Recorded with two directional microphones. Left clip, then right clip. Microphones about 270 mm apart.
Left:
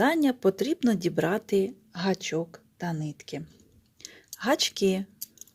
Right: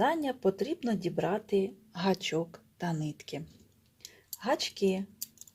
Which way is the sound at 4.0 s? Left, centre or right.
Left.